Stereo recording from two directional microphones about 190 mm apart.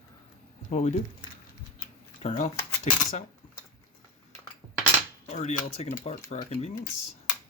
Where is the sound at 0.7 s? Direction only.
35° left (ahead or behind).